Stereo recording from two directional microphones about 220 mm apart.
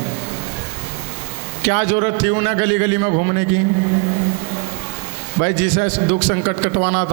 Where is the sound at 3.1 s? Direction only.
30° right (ahead or behind).